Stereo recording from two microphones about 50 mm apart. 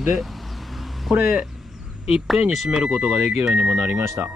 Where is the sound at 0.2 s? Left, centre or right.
Centre.